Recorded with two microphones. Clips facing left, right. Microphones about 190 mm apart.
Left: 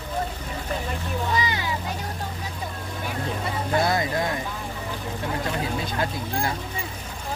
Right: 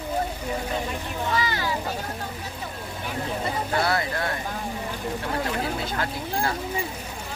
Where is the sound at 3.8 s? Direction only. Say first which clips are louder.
Left 2 dB; 15° left (ahead or behind).